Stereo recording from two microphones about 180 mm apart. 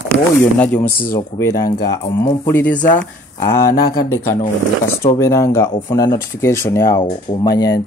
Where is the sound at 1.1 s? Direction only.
20° left (ahead or behind).